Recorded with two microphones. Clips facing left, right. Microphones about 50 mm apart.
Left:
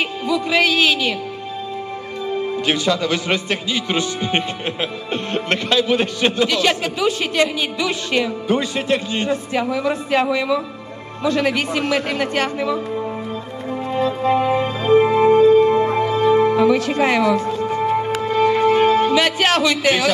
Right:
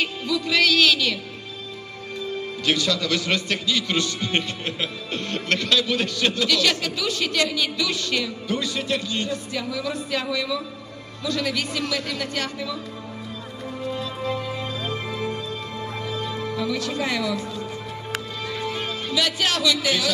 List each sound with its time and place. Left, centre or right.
0.0 s a man's voice: left
2.6 s a man's voice: left
13.8 s music: left